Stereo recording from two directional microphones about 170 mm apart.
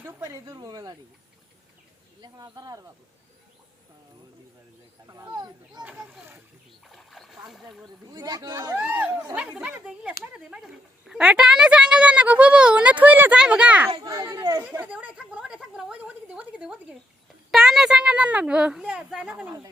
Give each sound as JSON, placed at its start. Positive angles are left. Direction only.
{"t": 0.0, "sound": "speech", "side_deg": -20}
{"t": 2.2, "sound": "speech", "side_deg": -25}
{"t": 5.0, "sound": "speech", "side_deg": -20}
{"t": 5.8, "sound": "a woman's voice", "side_deg": -10}
{"t": 6.8, "sound": "splash", "side_deg": 0}
{"t": 8.1, "sound": "speech", "side_deg": -20}
{"t": 8.8, "sound": "a woman's voice", "side_deg": -10}
{"t": 13.9, "sound": "speech", "side_deg": -25}
{"t": 14.6, "sound": "a woman's voice", "side_deg": -10}